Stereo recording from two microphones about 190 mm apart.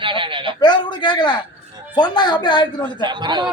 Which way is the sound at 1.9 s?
20° left (ahead or behind).